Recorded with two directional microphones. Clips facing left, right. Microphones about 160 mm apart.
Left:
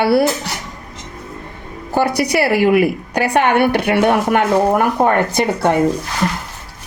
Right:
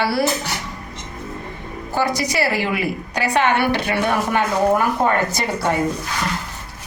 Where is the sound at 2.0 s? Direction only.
60° left (ahead or behind).